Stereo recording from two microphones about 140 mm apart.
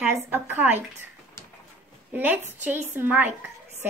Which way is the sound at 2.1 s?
15° right (ahead or behind).